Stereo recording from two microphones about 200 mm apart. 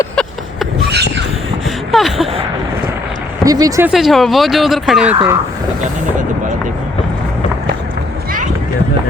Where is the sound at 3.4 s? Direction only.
20° right (ahead or behind).